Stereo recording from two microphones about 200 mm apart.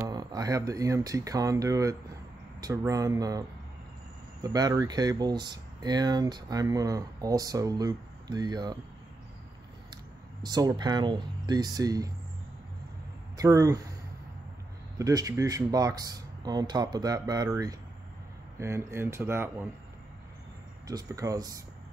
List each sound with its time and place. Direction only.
0.0 s speech: 20° right (ahead or behind)
10.4 s speech: 20° right (ahead or behind)
13.4 s speech: 15° right (ahead or behind)
15.0 s speech: 15° right (ahead or behind)
20.8 s speech: 15° right (ahead or behind)